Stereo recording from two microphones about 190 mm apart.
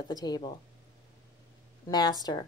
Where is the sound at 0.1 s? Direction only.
20° left (ahead or behind).